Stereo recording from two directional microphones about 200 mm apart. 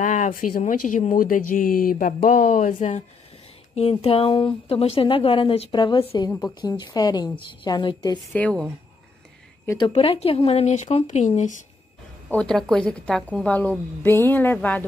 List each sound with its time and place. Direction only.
0.0 s a woman's voice: 40° left (ahead or behind); by 8.2 s 20° left (ahead or behind)
8.3 s speech: 5° left (ahead or behind)
9.7 s speech: 25° left (ahead or behind)
12.3 s a woman's voice: 5° left (ahead or behind)